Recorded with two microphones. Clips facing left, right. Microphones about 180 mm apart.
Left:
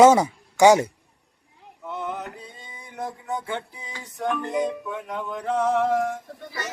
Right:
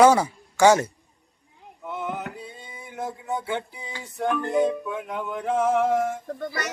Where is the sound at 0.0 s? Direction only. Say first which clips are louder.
Left 2 dB; 20° left (ahead or behind).